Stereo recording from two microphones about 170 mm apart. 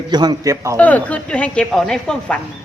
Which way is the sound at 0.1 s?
25° right (ahead or behind).